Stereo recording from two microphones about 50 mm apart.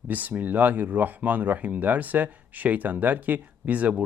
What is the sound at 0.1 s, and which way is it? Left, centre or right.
Speech, right.